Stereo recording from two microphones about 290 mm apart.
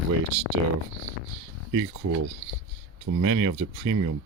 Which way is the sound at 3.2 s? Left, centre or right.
Right.